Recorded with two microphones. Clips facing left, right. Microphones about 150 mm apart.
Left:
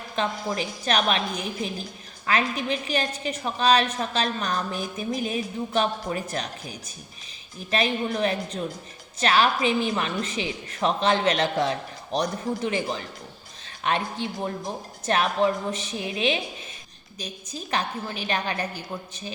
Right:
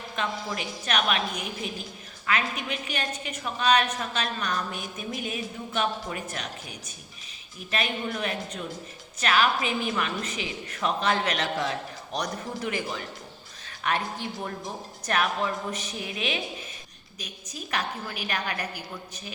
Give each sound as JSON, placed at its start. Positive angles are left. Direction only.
{"t": 0.2, "sound": "a woman's voice", "side_deg": 35}